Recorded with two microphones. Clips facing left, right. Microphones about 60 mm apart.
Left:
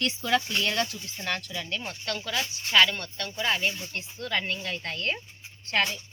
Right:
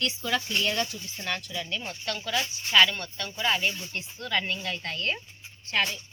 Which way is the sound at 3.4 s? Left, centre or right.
Left.